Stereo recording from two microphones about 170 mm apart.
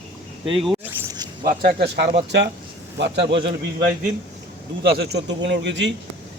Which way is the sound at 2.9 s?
90° right.